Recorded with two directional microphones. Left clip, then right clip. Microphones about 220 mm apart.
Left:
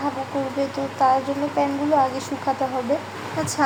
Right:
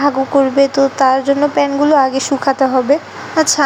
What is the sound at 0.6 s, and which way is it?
A woman's voice, 30° right (ahead or behind).